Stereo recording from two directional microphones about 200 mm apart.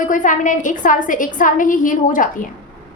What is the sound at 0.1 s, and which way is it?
A woman's voice, 40° left (ahead or behind).